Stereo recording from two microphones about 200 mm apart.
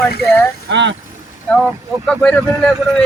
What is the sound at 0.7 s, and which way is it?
Speech, 65° right (ahead or behind).